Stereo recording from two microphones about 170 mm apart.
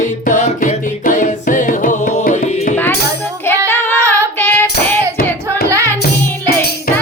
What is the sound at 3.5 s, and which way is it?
Music, 15° left (ahead or behind).